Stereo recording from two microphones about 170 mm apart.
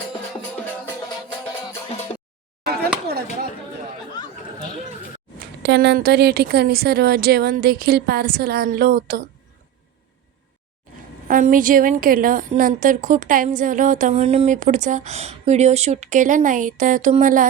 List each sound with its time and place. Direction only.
5.4 s a woman's voice: 80° right; by 9.2 s 60° right (ahead or behind)
11.3 s a woman's voice: 50° right (ahead or behind)